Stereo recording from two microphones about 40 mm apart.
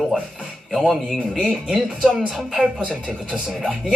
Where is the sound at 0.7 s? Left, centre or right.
Centre.